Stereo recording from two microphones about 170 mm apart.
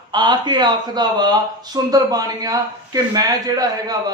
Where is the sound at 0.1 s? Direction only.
25° right (ahead or behind).